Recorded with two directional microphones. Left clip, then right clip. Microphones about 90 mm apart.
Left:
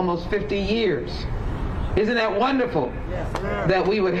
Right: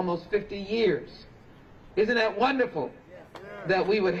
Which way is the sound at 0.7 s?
25° right (ahead or behind).